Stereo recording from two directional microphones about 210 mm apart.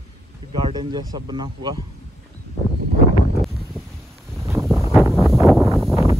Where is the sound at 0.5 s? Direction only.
25° right (ahead or behind).